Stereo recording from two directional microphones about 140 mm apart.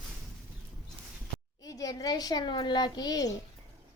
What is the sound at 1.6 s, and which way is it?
A woman's voice, 25° left (ahead or behind).